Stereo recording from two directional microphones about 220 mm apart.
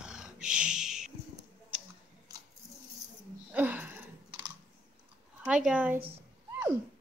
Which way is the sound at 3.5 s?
5° right (ahead or behind).